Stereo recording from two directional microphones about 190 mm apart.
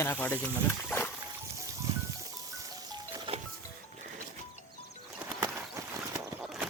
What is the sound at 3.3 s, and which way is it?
Music, 30° right (ahead or behind).